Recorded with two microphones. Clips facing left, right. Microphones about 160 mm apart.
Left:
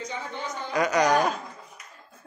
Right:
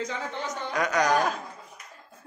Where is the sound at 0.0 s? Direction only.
90° right.